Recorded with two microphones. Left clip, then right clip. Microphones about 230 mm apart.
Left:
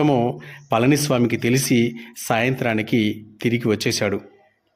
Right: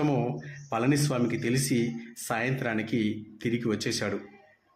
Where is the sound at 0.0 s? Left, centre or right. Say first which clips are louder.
Left 9 dB; left.